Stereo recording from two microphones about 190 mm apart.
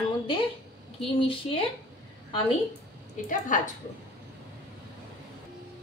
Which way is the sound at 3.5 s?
45° left (ahead or behind).